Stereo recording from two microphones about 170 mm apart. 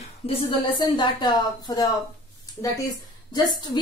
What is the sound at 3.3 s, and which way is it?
Speech, 25° left (ahead or behind).